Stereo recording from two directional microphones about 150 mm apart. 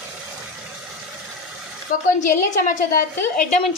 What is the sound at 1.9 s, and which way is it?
Speech, 65° left (ahead or behind).